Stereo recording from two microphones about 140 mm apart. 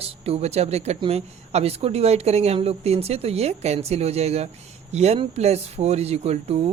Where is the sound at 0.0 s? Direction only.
45° right (ahead or behind).